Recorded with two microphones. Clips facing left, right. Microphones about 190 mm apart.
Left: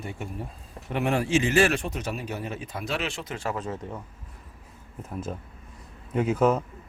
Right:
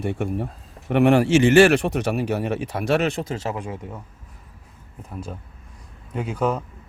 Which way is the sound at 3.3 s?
20° right (ahead or behind).